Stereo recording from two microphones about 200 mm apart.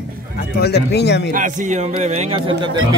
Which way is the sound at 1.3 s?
40° right (ahead or behind).